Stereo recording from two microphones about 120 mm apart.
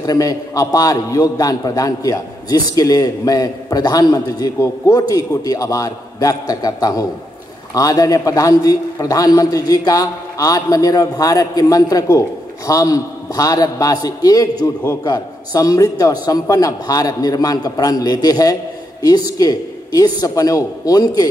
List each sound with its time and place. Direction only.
0.0 s a man's voice: 30° left (ahead or behind)